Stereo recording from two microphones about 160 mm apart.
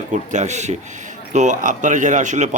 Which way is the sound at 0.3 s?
45° right (ahead or behind).